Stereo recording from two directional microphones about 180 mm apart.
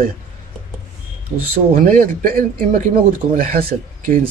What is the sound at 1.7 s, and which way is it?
Speech, 50° right (ahead or behind).